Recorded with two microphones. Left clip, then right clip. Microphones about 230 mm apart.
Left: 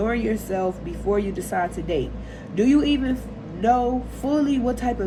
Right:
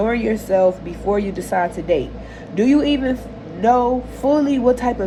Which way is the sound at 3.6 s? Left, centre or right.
Right.